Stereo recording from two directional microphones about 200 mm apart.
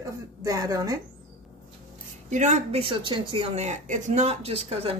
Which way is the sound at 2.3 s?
35° right (ahead or behind).